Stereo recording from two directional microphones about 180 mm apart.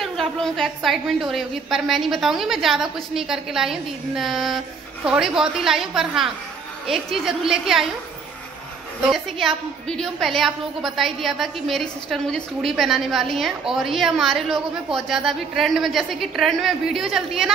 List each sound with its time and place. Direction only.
0.0 s a woman's voice: centre (ahead or behind)
9.8 s a woman's voice: 5° left (ahead or behind)